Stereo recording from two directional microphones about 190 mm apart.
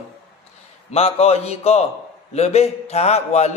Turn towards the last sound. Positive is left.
turn(degrees=35)  # may be behind; listen again after turning